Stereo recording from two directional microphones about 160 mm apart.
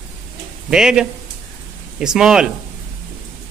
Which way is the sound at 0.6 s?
5° right (ahead or behind).